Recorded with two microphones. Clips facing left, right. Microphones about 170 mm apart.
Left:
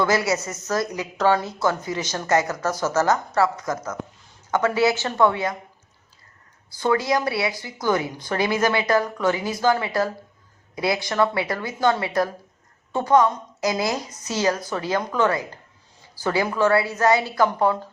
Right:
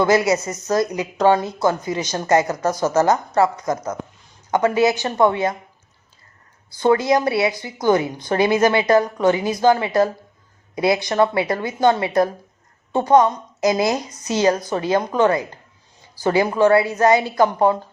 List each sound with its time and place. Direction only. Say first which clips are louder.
0.0 s a woman's voice: right 5 dB; 20° right (ahead or behind)
6.7 s a woman's voice: right 5 dB; 20° right (ahead or behind)